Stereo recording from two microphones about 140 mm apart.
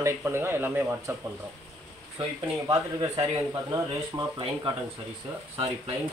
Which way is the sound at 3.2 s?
25° right (ahead or behind).